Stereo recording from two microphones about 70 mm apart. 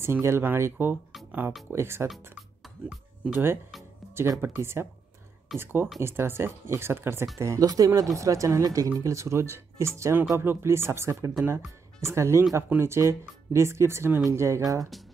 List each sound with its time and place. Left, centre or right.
0.0 s speech: right
3.3 s speech: right
7.3 s speech: right
11.4 s speech: right
14.6 s speech: right